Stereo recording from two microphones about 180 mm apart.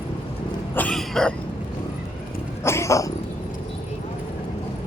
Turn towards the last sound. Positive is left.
turn(degrees=15)  # may be behind; listen again after turning